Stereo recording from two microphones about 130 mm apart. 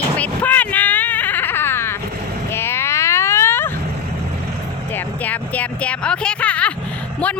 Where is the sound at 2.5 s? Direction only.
20° left (ahead or behind).